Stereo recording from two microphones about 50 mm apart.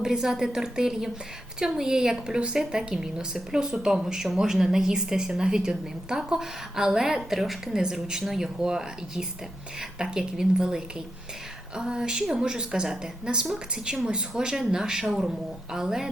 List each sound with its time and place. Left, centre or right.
0.0 s a woman's voice: centre
7.7 s a woman's voice: centre